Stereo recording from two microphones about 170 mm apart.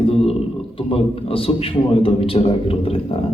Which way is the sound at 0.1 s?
35° left (ahead or behind).